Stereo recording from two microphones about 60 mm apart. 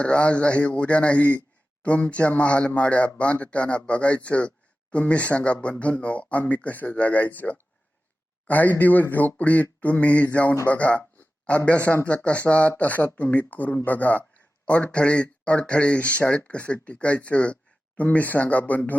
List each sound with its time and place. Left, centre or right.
0.0 s speech: centre